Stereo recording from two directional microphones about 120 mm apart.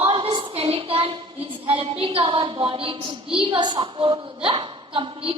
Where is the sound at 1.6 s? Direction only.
50° right (ahead or behind).